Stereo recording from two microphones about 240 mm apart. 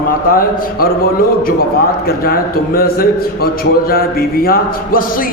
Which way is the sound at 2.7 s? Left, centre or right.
Left.